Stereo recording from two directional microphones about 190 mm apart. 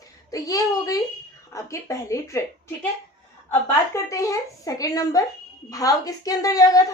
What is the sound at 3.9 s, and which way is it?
A woman's voice, 15° left (ahead or behind).